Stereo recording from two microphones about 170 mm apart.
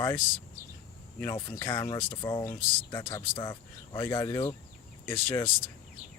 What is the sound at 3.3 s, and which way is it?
Speech, 30° left (ahead or behind).